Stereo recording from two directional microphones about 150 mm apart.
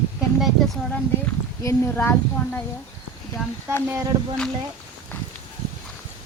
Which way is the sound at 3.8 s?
20° right (ahead or behind).